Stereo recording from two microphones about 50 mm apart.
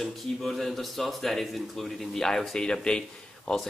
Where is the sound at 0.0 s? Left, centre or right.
Centre.